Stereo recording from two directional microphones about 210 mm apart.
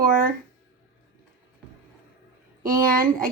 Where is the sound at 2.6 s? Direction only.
40° right (ahead or behind).